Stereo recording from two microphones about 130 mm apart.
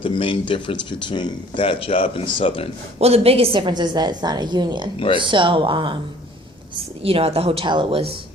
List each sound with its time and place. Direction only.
0.0 s speech: 40° left (ahead or behind)
3.0 s a woman's voice: 50° right (ahead or behind)
7.0 s a woman's voice: 45° right (ahead or behind)